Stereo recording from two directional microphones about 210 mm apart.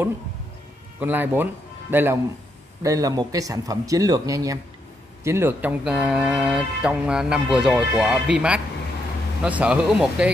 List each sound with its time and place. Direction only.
0.9 s a man's voice: 10° right (ahead or behind)